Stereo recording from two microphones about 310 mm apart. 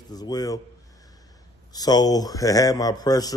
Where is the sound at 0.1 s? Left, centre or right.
Centre.